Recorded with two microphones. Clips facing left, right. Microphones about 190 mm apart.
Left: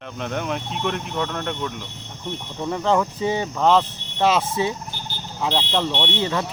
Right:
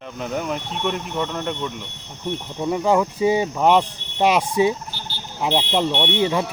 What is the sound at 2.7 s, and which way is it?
Speech, 10° right (ahead or behind).